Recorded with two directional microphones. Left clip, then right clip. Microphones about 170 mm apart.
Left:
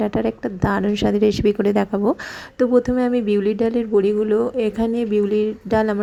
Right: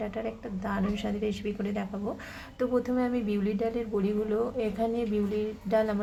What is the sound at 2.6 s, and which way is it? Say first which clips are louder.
Speech: left 11 dB; 35° left (ahead or behind).